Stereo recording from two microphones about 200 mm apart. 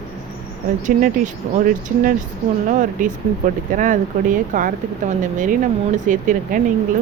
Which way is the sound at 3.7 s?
40° right (ahead or behind).